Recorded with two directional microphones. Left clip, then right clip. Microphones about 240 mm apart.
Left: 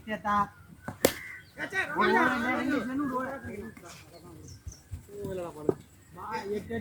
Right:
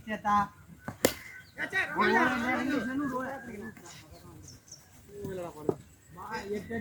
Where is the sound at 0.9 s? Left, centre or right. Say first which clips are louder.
Left 2 dB; centre.